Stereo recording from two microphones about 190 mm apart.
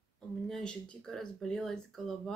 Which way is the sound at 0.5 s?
5° left (ahead or behind).